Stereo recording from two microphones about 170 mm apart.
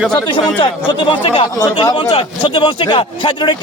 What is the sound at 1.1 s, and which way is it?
A man's voice, 30° left (ahead or behind).